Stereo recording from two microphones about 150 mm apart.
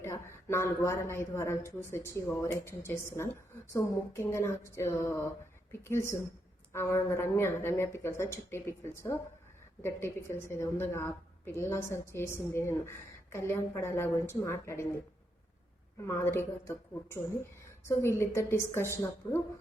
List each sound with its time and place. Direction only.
0.0 s a woman's voice: 15° left (ahead or behind)
16.0 s a woman's voice: 20° left (ahead or behind)